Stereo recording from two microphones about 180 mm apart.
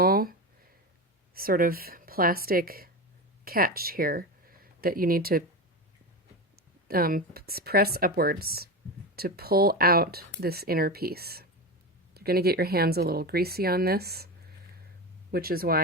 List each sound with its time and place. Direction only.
0.0 s a sound: 55° right (ahead or behind)
1.3 s speech: 55° right (ahead or behind)
6.8 s speech: 55° right (ahead or behind)
15.3 s speech: 55° right (ahead or behind)